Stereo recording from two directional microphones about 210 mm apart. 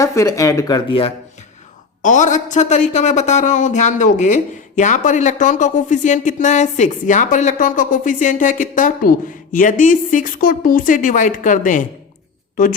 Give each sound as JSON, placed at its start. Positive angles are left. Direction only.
{"t": 0.0, "sound": "speech", "side_deg": 15}
{"t": 2.0, "sound": "speech", "side_deg": 35}